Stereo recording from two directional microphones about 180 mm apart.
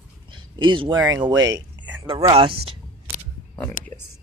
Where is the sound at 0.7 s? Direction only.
25° right (ahead or behind).